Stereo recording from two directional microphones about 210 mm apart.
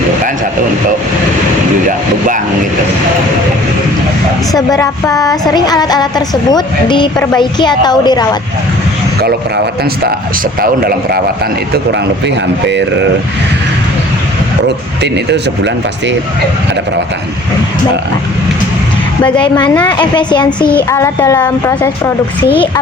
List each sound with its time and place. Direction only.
1.9 s speech: 40° right (ahead or behind)
4.5 s a woman's voice: 15° left (ahead or behind)
10.6 s a man's voice: 45° right (ahead or behind)
12.6 s speech: 60° right (ahead or behind)
15.0 s speech: 55° right (ahead or behind)
19.4 s a woman's voice: 20° left (ahead or behind)
19.7 s speech: 5° left (ahead or behind)
20.0 s a woman's voice: 20° left (ahead or behind)
22.5 s a woman's voice: 25° left (ahead or behind)